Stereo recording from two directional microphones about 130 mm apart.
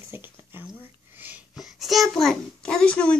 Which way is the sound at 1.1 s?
15° right (ahead or behind).